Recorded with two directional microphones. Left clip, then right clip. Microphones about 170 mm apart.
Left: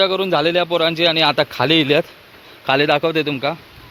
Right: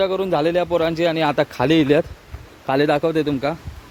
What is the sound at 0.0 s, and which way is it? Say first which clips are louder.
Speech: left 3 dB; 10° right (ahead or behind).